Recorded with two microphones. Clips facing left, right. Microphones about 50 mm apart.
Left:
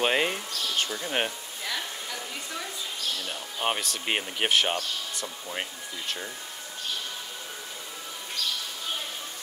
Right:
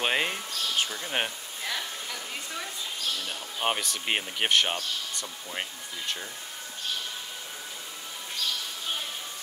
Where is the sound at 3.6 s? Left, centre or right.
Centre.